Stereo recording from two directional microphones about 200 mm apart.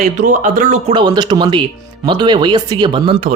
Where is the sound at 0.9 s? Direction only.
20° right (ahead or behind).